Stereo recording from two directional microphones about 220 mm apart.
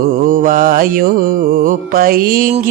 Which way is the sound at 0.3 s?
40° right (ahead or behind).